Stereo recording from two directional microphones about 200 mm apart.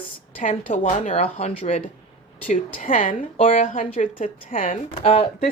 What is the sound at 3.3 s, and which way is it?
Speech, 30° left (ahead or behind).